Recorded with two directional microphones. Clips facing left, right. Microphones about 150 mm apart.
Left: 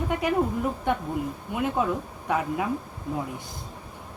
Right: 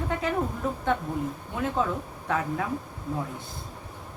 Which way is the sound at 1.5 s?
15° left (ahead or behind).